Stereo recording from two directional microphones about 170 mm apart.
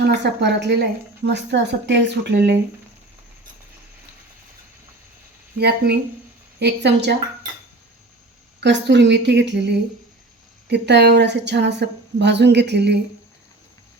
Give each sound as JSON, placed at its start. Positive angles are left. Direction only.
{"t": 0.0, "sound": "a woman's voice", "side_deg": -90}
{"t": 5.5, "sound": "speech", "side_deg": -70}
{"t": 6.6, "sound": "speech", "side_deg": -85}
{"t": 8.6, "sound": "a woman's voice", "side_deg": -90}